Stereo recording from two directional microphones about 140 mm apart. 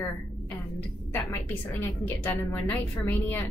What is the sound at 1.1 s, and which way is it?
A woman's voice, 15° left (ahead or behind).